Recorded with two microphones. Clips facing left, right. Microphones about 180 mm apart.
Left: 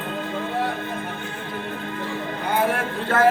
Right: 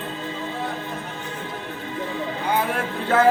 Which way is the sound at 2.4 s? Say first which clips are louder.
Left 2 dB; 55° left (ahead or behind).